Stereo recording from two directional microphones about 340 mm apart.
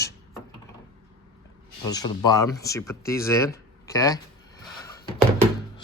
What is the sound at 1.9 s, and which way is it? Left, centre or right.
Speech, centre.